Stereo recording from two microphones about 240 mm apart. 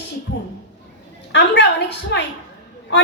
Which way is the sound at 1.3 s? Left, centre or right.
Left.